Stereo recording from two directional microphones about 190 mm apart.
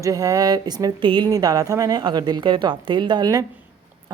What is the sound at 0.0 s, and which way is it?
Speech, 15° right (ahead or behind).